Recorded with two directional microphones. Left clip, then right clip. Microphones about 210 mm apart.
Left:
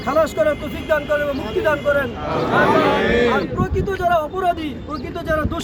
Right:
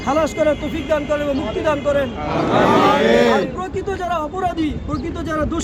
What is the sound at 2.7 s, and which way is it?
Speech, 45° right (ahead or behind).